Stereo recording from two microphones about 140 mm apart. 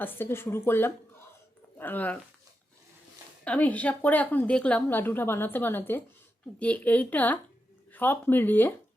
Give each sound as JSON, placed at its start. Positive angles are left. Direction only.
{"t": 0.0, "sound": "a woman's voice", "side_deg": 15}
{"t": 3.4, "sound": "a woman's voice", "side_deg": 10}